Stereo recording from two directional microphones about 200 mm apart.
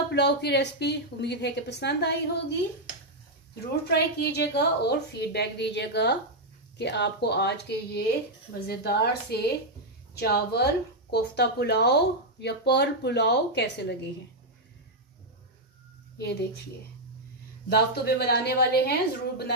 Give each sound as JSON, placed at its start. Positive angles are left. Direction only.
{"t": 0.1, "sound": "a woman's voice", "side_deg": 55}
{"t": 3.8, "sound": "a woman's voice", "side_deg": 55}
{"t": 16.2, "sound": "a woman's voice", "side_deg": 55}
{"t": 17.6, "sound": "a woman's voice", "side_deg": 55}